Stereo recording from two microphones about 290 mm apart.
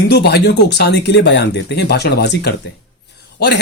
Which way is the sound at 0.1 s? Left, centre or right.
Left.